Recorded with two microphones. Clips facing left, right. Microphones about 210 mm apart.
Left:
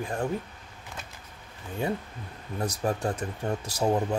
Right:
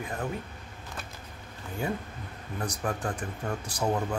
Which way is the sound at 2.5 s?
25° left (ahead or behind).